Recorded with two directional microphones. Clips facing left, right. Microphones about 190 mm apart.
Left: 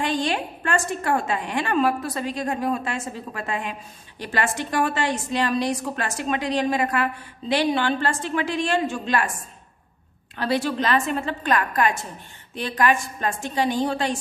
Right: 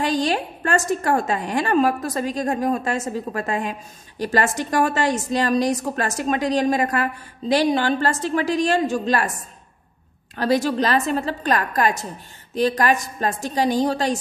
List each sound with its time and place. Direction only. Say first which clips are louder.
0.0 s a woman's voice: right 3 dB; 40° right (ahead or behind)
10.3 s a woman's voice: right 4 dB; 40° right (ahead or behind)